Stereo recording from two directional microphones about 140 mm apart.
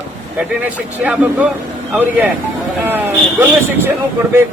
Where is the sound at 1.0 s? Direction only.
10° right (ahead or behind).